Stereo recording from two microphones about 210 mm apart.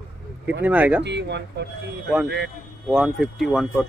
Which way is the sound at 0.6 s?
5° right (ahead or behind).